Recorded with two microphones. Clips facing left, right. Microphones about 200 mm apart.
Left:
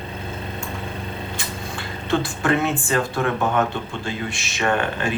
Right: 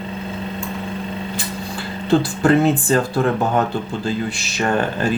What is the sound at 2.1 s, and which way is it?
Speech, 35° right (ahead or behind).